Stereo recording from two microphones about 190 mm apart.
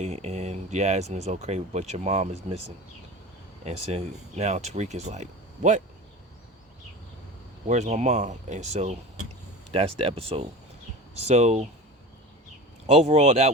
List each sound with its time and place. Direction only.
0.0 s speech: 35° right (ahead or behind)
3.7 s speech: 35° right (ahead or behind)
7.7 s speech: 35° right (ahead or behind)
12.9 s speech: 35° right (ahead or behind)